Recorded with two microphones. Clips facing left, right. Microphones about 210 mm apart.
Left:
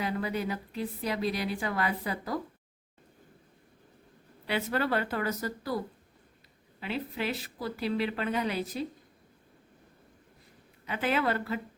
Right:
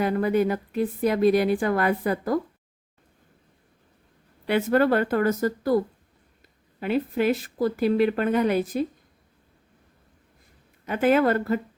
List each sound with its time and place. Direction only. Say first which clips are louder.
0.0 s a woman's voice: right 10 dB; 55° right (ahead or behind)
4.4 s a woman's voice: right 10 dB; 50° right (ahead or behind)
10.8 s a woman's voice: right 9 dB; 50° right (ahead or behind)